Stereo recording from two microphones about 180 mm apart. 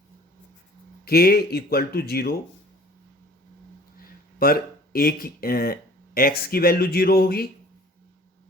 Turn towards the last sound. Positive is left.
turn(degrees=55)  # may be behind; listen again after turning